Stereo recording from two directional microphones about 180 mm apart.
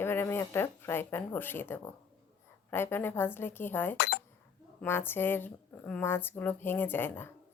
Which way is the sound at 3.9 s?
60° left (ahead or behind).